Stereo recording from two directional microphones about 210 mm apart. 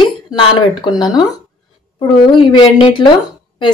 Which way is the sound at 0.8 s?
20° left (ahead or behind).